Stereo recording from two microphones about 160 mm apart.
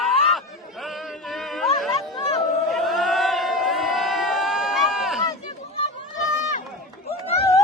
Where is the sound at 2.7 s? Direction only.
Centre (ahead or behind).